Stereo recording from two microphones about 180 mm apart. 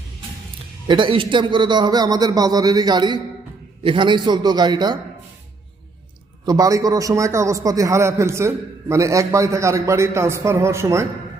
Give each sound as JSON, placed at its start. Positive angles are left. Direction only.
{"t": 0.9, "sound": "a man's voice", "side_deg": -25}
{"t": 6.4, "sound": "a man's voice", "side_deg": -20}